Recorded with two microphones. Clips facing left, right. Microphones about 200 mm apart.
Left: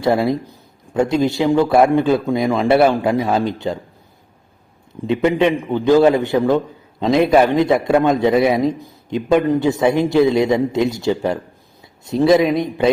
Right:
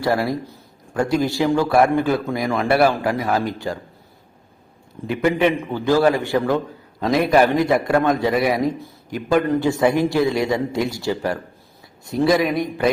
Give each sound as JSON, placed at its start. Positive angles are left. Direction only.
{"t": 0.0, "sound": "a man's voice", "side_deg": 20}
{"t": 4.9, "sound": "a man's voice", "side_deg": 20}